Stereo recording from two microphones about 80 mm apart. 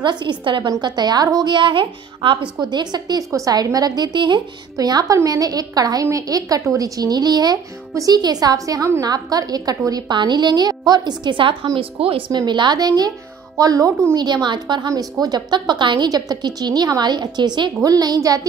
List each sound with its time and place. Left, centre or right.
0.0 s a woman's voice: right
2.6 s a woman's voice: right
3.3 s a woman's voice: right
4.7 s a woman's voice: right
7.0 s a woman's voice: right
7.9 s a woman's voice: right
10.1 s a woman's voice: right
12.2 s a woman's voice: right
14.1 s a woman's voice: right
14.9 s a woman's voice: right
16.1 s a woman's voice: right
17.8 s a woman's voice: right